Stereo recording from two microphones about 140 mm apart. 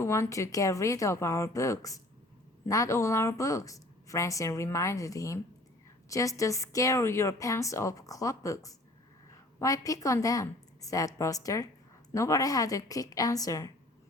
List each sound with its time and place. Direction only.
0.0 s a woman's voice: 20° left (ahead or behind)